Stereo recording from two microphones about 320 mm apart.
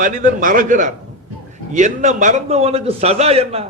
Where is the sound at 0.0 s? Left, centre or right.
Right.